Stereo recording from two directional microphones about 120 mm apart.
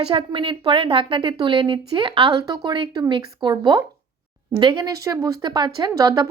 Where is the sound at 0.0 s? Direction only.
45° right (ahead or behind).